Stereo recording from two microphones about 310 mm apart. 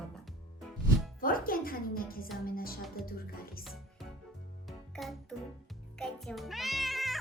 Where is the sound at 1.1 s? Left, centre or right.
Left.